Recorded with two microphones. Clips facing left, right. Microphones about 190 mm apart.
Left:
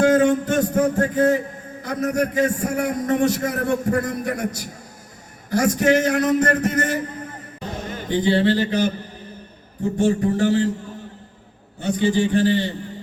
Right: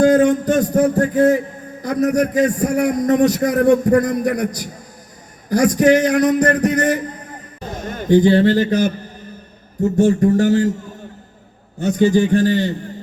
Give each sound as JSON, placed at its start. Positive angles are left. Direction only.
{"t": 0.0, "sound": "a sound", "side_deg": -40}
{"t": 1.1, "sound": "a man's voice", "side_deg": -40}
{"t": 7.9, "sound": "a man's voice", "side_deg": -45}
{"t": 10.0, "sound": "a man's voice", "side_deg": -45}
{"t": 11.8, "sound": "a man's voice", "side_deg": -45}